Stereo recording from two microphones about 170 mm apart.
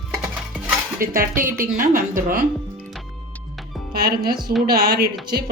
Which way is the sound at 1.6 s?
55° right (ahead or behind).